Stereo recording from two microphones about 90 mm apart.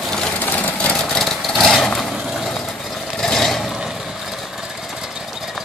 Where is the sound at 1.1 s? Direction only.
5° left (ahead or behind).